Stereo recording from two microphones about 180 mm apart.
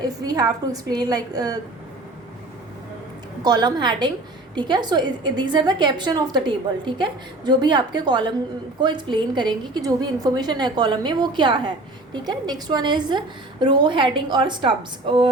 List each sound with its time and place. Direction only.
0.0 s a woman's voice: 20° right (ahead or behind)
3.4 s a woman's voice: 20° right (ahead or behind)